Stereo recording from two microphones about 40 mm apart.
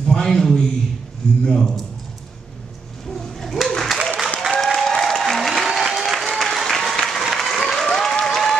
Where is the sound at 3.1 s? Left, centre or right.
Centre.